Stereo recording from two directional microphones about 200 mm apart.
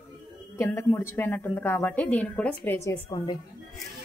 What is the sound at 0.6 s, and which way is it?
A woman's voice, 10° left (ahead or behind).